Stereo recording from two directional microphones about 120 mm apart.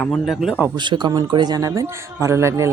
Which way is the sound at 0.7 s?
40° right (ahead or behind).